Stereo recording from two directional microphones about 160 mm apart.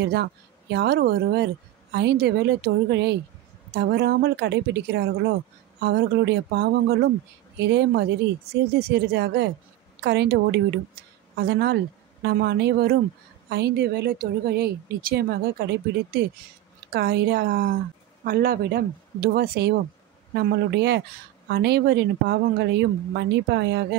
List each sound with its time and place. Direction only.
0.1 s a woman's voice: 90° right
18.2 s speech: 65° right (ahead or behind); by 23.9 s 90° right